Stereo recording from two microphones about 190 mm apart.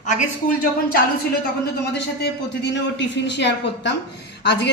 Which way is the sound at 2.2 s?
70° left (ahead or behind).